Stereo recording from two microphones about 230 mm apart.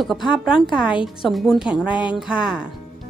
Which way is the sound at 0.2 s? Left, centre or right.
Left.